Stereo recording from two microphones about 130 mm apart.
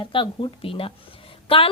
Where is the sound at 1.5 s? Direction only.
45° left (ahead or behind).